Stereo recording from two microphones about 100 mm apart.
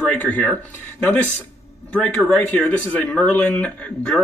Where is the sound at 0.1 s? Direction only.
15° left (ahead or behind).